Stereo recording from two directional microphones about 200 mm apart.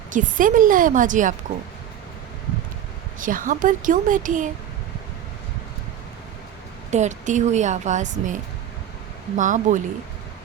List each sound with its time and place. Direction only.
0.1 s a woman's voice: 40° right (ahead or behind)
3.2 s a woman's voice: 40° right (ahead or behind)
6.9 s a woman's voice: 35° right (ahead or behind)